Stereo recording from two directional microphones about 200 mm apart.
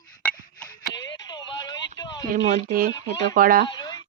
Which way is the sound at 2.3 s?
45° right (ahead or behind).